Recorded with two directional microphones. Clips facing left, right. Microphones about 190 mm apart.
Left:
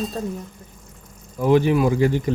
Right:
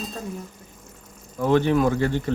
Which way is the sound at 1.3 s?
10° left (ahead or behind).